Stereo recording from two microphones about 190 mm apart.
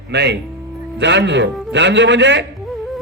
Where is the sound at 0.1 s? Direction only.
65° right (ahead or behind).